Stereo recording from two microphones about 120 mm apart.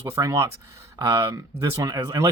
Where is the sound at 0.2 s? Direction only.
25° right (ahead or behind).